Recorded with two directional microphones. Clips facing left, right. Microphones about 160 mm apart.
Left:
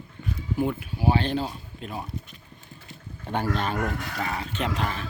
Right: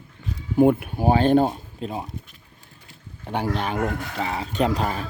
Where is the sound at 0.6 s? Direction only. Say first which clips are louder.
Right 11 dB; 55° right (ahead or behind).